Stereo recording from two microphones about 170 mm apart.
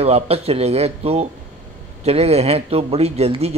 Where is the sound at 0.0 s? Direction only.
35° right (ahead or behind).